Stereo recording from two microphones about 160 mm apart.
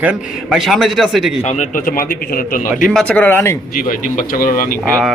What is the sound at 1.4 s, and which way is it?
A man's voice, 50° left (ahead or behind).